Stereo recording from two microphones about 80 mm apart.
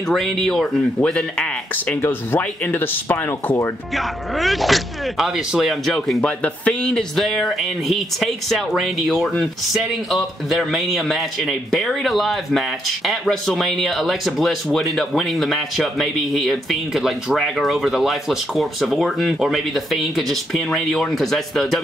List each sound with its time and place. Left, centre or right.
0.1 s speech: centre
2.0 s speech: left
3.9 s speech: centre
6.2 s speech: centre